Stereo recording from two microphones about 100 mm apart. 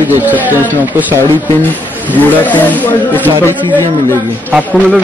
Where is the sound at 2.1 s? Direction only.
15° left (ahead or behind).